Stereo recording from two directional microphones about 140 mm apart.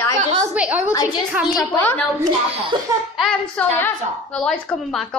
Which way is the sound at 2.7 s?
35° right (ahead or behind).